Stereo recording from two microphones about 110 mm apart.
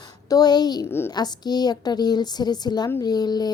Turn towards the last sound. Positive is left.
turn(degrees=40)  # may be behind; listen again after turning